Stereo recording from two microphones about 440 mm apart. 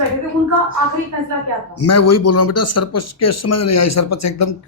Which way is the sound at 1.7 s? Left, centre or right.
Left.